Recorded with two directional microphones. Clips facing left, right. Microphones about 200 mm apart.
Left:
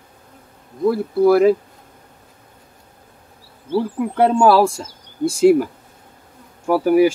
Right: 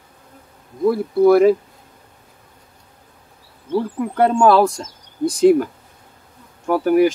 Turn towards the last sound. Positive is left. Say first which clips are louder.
# left 1 dB
turn(degrees=5)  # may be behind; listen again after turning